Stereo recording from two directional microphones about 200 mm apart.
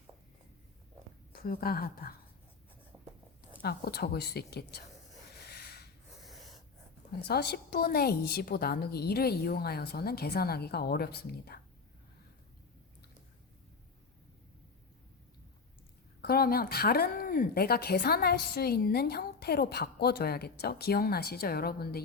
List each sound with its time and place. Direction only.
1.3 s speech: 50° left (ahead or behind)
3.6 s speech: 50° left (ahead or behind)
5.5 s a sound: 55° left (ahead or behind)
7.3 s speech: 55° left (ahead or behind)
16.2 s speech: 50° left (ahead or behind)